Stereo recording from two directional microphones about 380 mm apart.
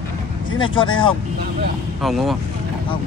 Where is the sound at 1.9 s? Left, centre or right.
Centre.